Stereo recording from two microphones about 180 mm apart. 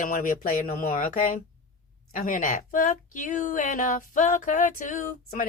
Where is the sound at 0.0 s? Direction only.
50° left (ahead or behind).